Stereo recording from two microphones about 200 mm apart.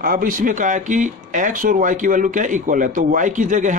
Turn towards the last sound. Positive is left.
turn(degrees=-40)  # may be behind; listen again after turning